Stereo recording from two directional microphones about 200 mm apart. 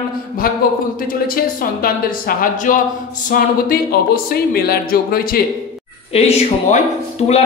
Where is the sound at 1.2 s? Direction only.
45° left (ahead or behind).